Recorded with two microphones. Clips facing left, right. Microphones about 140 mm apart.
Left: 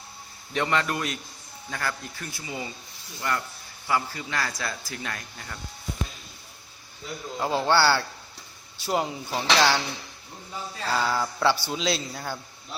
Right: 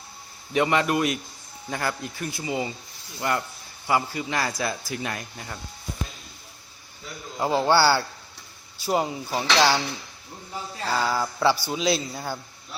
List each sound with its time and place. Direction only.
0.5 s speech: 15° right (ahead or behind)
7.3 s speech: 10° right (ahead or behind)
10.9 s speech: 5° right (ahead or behind)